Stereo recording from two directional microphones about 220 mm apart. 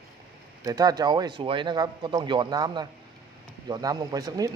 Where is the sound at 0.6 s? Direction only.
15° right (ahead or behind).